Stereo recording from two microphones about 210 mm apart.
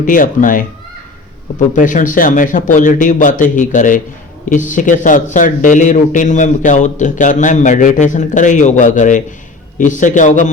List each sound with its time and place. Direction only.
0.0 s speech: 40° left (ahead or behind)